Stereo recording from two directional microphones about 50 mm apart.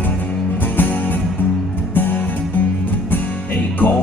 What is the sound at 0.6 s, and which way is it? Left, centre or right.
Music, left.